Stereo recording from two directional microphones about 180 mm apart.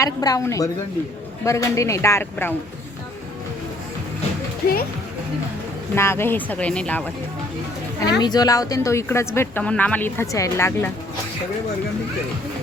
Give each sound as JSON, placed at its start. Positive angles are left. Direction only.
{"t": 0.0, "sound": "a woman's voice", "side_deg": 20}
{"t": 4.6, "sound": "speech", "side_deg": 55}
{"t": 5.9, "sound": "speech", "side_deg": 15}
{"t": 8.2, "sound": "speech", "side_deg": 20}